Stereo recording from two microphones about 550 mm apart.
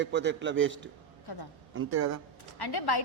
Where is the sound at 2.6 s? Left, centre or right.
Left.